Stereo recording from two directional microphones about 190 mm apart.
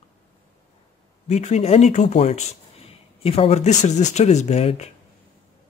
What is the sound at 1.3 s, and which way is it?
Speech, 35° left (ahead or behind).